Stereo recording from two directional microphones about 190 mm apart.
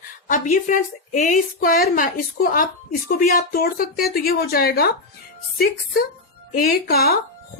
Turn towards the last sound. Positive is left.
turn(degrees=55)  # may be behind; listen again after turning